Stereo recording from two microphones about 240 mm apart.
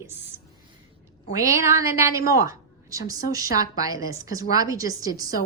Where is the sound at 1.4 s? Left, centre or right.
Centre.